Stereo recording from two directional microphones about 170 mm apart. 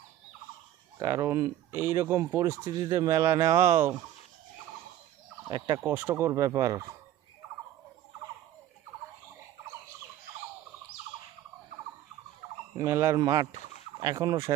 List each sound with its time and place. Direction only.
0.9 s speech: 15° right (ahead or behind)
5.5 s speech: 25° right (ahead or behind)
5.8 s speech: 15° right (ahead or behind)
12.7 s speech: 20° right (ahead or behind)